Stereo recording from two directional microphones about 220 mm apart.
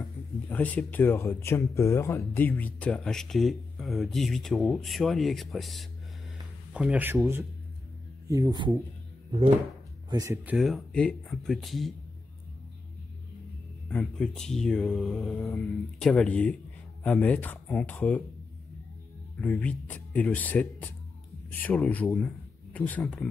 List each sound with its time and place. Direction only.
0.0 s speech: 5° left (ahead or behind); by 8.7 s 20° right (ahead or behind)
10.0 s speech: 15° right (ahead or behind); by 11.9 s centre (ahead or behind)
13.8 s speech: 5° left (ahead or behind)
19.4 s a man's voice: 5° left (ahead or behind)